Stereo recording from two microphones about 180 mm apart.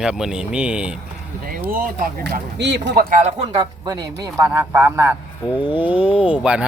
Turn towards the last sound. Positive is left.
turn(degrees=-5)  # may be behind; listen again after turning